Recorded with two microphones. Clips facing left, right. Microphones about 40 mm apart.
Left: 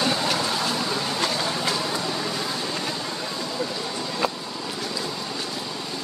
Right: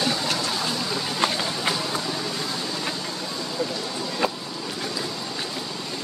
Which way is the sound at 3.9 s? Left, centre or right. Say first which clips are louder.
Right 1 dB; centre.